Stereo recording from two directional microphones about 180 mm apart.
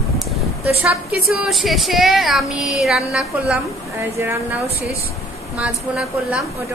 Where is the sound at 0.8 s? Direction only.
5° right (ahead or behind).